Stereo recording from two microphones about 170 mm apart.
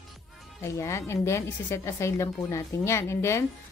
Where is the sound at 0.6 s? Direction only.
15° left (ahead or behind).